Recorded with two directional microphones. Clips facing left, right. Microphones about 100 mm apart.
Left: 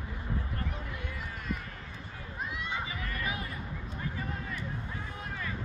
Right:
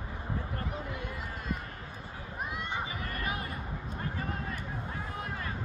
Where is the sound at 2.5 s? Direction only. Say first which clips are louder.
Right 1 dB; 40° right (ahead or behind).